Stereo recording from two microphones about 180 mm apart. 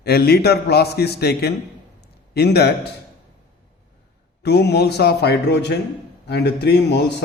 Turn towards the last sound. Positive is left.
turn(degrees=70)  # may be behind; listen again after turning